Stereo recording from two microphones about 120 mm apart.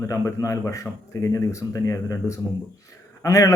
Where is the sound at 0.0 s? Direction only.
25° left (ahead or behind).